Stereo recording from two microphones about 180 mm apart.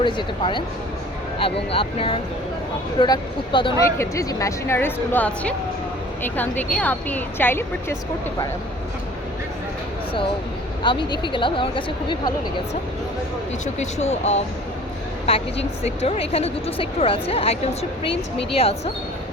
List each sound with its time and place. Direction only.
0.0 s a woman's voice: 25° left (ahead or behind)
3.8 s a woman's voice: 15° left (ahead or behind)
10.8 s a woman's voice: 25° left (ahead or behind)
13.7 s speech: 40° left (ahead or behind)